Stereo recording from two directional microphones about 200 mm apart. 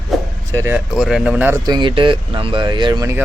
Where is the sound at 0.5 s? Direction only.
15° right (ahead or behind).